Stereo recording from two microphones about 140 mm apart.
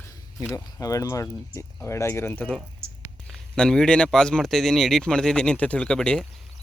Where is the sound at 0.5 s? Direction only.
25° left (ahead or behind).